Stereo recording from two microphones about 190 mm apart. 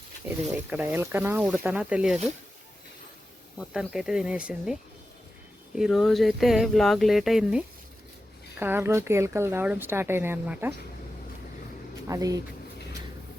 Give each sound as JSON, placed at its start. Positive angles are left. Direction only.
{"t": 0.4, "sound": "a woman's voice", "side_deg": -10}
{"t": 3.6, "sound": "a woman's voice", "side_deg": -5}
{"t": 12.0, "sound": "a woman's voice", "side_deg": -15}